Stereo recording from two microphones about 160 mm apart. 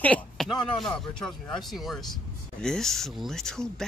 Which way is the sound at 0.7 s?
5° left (ahead or behind).